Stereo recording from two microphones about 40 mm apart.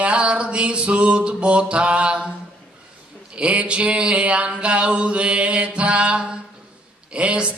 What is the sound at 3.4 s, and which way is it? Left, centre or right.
Mantra, right.